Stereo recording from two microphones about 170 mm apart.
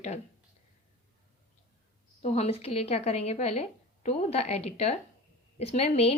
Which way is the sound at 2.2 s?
40° left (ahead or behind).